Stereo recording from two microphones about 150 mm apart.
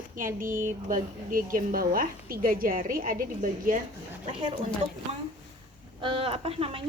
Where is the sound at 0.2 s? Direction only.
65° right (ahead or behind).